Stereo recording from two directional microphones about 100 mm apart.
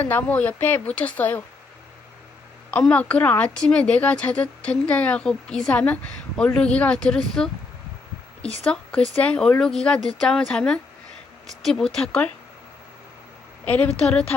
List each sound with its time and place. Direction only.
0.0 s a woman's voice: 20° left (ahead or behind)
2.9 s a woman's voice: 15° left (ahead or behind)
8.7 s a woman's voice: 10° left (ahead or behind)
13.7 s a woman's voice: 10° left (ahead or behind)